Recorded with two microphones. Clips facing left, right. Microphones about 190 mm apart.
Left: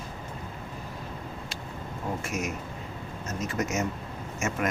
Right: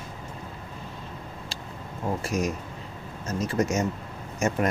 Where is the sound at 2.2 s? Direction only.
35° right (ahead or behind).